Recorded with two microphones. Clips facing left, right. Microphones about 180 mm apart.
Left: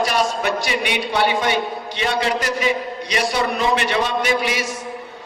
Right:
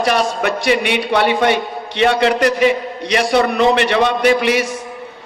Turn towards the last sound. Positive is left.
turn(degrees=-65)  # may be behind; listen again after turning